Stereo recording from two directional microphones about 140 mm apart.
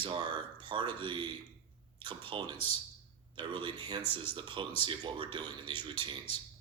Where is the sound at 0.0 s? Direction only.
35° right (ahead or behind).